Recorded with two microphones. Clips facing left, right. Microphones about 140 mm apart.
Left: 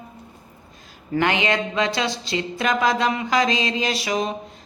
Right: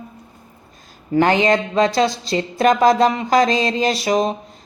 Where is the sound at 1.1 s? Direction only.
35° right (ahead or behind).